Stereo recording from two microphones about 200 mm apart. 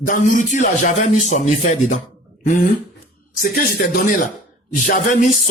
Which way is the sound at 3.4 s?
50° left (ahead or behind).